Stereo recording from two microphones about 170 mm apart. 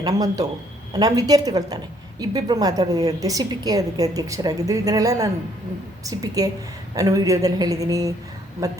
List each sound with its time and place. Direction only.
0.0 s a woman's voice: 20° right (ahead or behind)